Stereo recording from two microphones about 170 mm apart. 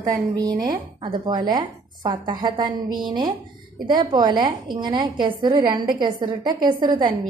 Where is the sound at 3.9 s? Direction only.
25° right (ahead or behind).